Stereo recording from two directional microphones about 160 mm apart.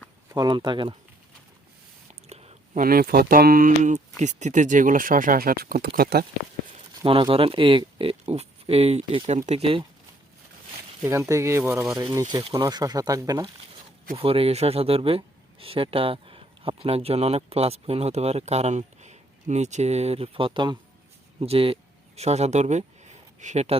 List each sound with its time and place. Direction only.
0.3 s speech: 30° right (ahead or behind)
2.2 s whispering: 40° right (ahead or behind)
2.7 s speech: 65° right (ahead or behind)
7.0 s speech: 30° right (ahead or behind)
11.0 s speech: 15° right (ahead or behind)
12.3 s speech: 25° right (ahead or behind)
14.2 s speech: 35° right (ahead or behind)